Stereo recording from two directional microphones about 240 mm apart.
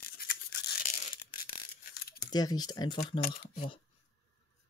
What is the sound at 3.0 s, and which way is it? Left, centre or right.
Speech, left.